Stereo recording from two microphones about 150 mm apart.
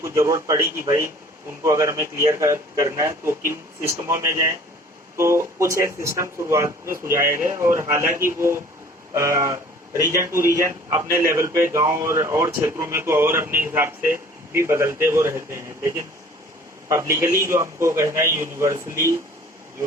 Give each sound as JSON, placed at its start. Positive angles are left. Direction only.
{"t": 0.0, "sound": "speech", "side_deg": -20}